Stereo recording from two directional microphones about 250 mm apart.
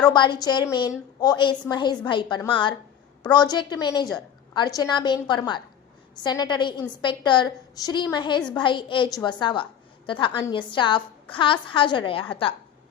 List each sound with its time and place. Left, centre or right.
0.1 s a woman's voice: centre